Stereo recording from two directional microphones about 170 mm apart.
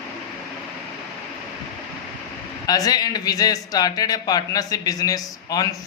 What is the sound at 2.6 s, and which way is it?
Speech, 20° left (ahead or behind).